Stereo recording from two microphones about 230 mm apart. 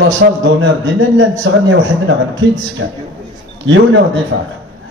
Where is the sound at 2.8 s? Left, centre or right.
Right.